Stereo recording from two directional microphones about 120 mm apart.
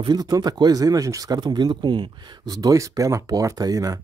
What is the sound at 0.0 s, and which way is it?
Speech, 35° right (ahead or behind).